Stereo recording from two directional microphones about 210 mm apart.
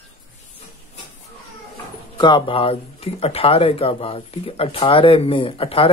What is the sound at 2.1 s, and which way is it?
Speech, 20° left (ahead or behind).